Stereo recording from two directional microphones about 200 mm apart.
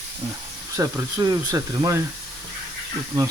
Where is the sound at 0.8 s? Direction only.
15° right (ahead or behind).